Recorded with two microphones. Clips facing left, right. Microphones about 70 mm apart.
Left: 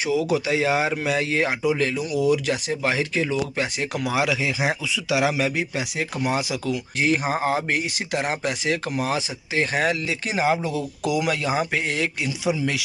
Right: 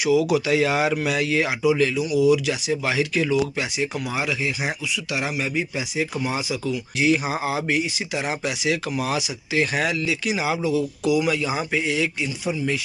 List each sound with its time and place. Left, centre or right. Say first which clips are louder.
0.0 s speech: right 3 dB; left
4.1 s speech: left 3 dB; left
5.9 s speech: even; left
7.0 s speech: right 1 dB; left
12.4 s speech: left 2 dB; left